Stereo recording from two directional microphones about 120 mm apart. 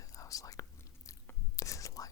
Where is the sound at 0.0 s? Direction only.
30° left (ahead or behind).